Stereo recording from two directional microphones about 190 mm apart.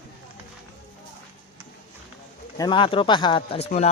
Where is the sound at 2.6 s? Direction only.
25° left (ahead or behind).